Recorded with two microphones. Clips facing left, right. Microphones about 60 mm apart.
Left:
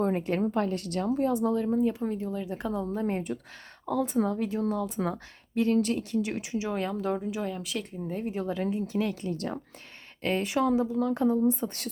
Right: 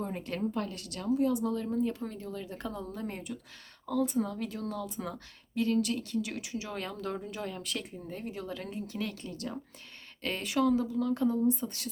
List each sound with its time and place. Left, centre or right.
0.2 s speech: left
0.5 s a woman's voice: left
1.5 s speech: left
2.9 s a woman's voice: left
4.4 s speech: left
4.9 s a woman's voice: left; by 8.3 s centre
8.3 s speech: left